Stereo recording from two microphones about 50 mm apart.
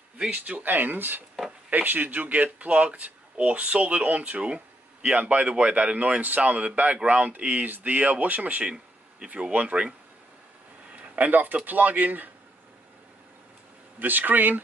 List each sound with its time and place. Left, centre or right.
0.3 s speech: right
11.0 s speech: right
13.9 s speech: right